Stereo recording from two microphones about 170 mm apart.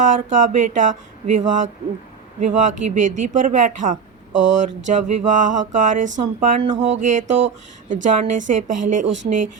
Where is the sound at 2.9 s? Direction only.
50° right (ahead or behind).